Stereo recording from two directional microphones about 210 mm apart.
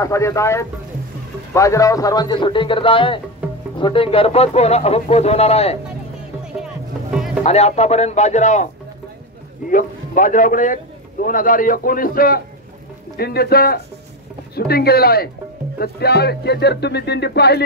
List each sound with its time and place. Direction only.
0.0 s speech: 15° left (ahead or behind); by 5.8 s 30° left (ahead or behind)
6.6 s music: 5° right (ahead or behind)
7.4 s a man's voice: 30° left (ahead or behind)
9.7 s a man's voice: 40° left (ahead or behind)